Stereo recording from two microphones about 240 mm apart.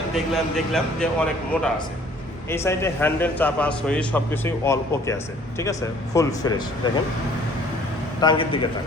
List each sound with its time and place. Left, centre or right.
0.1 s a man's voice: centre
8.2 s a man's voice: left